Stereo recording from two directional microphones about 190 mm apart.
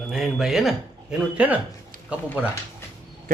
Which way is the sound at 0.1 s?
Centre (ahead or behind).